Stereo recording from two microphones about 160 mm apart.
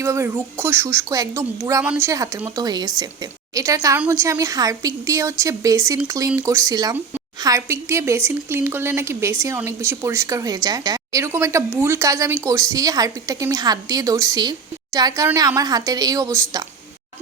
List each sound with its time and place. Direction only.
0.0 s a woman's voice: 15° right (ahead or behind)